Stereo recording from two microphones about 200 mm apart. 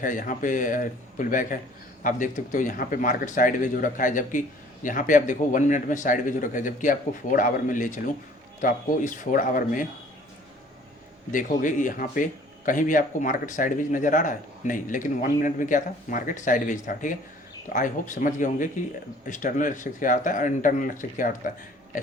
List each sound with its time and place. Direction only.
0.0 s speech: 40° left (ahead or behind)
11.3 s speech: 40° left (ahead or behind)